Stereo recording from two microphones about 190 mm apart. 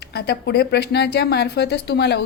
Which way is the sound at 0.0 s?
55° left (ahead or behind).